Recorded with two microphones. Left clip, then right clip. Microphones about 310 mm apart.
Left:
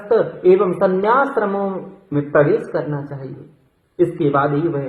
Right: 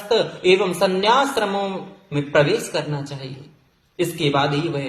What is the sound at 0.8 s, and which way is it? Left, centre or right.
A man's voice, right.